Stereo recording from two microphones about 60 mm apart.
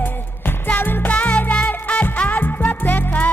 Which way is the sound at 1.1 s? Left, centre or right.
Centre.